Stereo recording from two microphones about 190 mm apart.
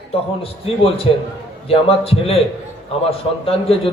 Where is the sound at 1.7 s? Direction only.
30° left (ahead or behind).